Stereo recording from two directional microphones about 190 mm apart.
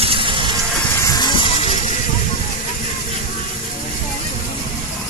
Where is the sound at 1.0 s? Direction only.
20° left (ahead or behind); by 1.9 s 35° left (ahead or behind).